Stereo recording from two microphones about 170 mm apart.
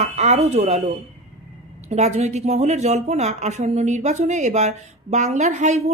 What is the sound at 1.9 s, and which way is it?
A woman's voice, 40° right (ahead or behind).